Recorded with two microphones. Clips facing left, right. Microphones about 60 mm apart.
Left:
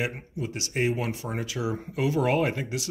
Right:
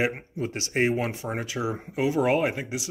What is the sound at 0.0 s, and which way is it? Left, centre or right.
Speech, right.